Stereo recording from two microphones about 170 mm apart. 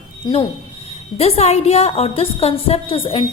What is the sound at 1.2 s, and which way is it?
A woman's voice, 40° left (ahead or behind).